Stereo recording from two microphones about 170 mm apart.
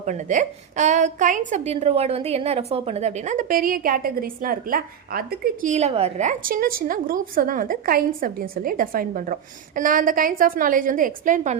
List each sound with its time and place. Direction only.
0.0 s a woman's voice: 45° right (ahead or behind)
5.7 s a woman's voice: 40° right (ahead or behind)